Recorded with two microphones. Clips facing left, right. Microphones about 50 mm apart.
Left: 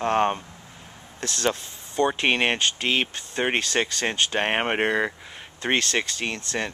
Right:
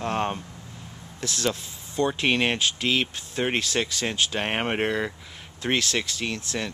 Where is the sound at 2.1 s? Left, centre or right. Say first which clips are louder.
Even; centre.